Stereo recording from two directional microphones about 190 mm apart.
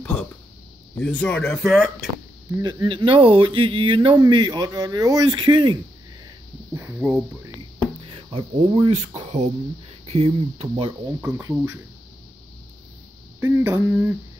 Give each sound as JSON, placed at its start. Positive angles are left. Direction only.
{"t": 0.0, "sound": "a sound", "side_deg": 5}
{"t": 0.9, "sound": "speech", "side_deg": 5}
{"t": 2.6, "sound": "speech", "side_deg": -25}
{"t": 7.0, "sound": "speech", "side_deg": 0}
{"t": 8.1, "sound": "speech", "side_deg": -30}
{"t": 11.1, "sound": "speech", "side_deg": -10}
{"t": 13.4, "sound": "speech", "side_deg": -15}